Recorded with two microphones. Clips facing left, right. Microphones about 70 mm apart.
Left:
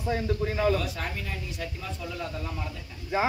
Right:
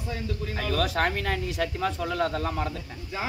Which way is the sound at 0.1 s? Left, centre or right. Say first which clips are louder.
Left 5 dB; left.